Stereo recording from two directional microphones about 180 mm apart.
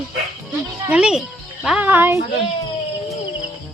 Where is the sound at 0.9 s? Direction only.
5° right (ahead or behind).